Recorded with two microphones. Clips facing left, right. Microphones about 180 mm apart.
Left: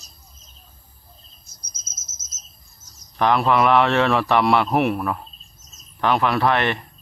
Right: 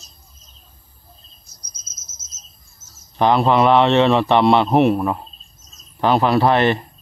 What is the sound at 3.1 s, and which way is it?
A man's voice, 30° right (ahead or behind).